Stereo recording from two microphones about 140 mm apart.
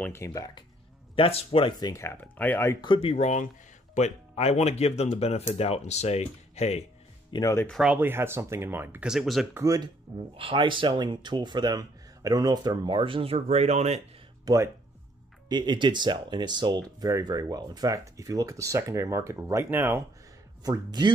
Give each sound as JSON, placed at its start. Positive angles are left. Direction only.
{"t": 0.0, "sound": "speech", "side_deg": 20}
{"t": 1.1, "sound": "speech", "side_deg": 40}
{"t": 2.8, "sound": "speech", "side_deg": 40}
{"t": 7.3, "sound": "speech", "side_deg": 25}
{"t": 7.6, "sound": "speech", "side_deg": 0}
{"t": 7.9, "sound": "speech", "side_deg": -15}
{"t": 9.1, "sound": "speech", "side_deg": 0}
{"t": 9.5, "sound": "speech", "side_deg": -15}
{"t": 10.3, "sound": "speech", "side_deg": -40}
{"t": 14.4, "sound": "speech", "side_deg": -20}
{"t": 15.4, "sound": "speech", "side_deg": -30}
{"t": 20.6, "sound": "speech", "side_deg": -30}